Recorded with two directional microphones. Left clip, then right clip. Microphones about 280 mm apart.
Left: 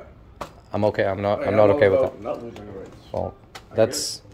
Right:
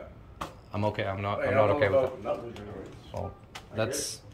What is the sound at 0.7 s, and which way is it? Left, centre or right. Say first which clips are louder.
Speech: left 10 dB; centre.